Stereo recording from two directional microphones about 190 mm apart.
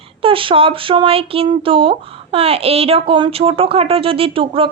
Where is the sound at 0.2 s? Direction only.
30° right (ahead or behind).